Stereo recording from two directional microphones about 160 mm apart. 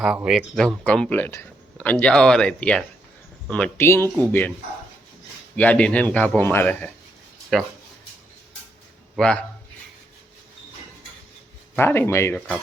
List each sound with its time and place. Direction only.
0.0 s speech: 5° right (ahead or behind)
5.5 s speech: 10° left (ahead or behind)
9.1 s speech: 5° left (ahead or behind)
11.8 s speech: 15° left (ahead or behind)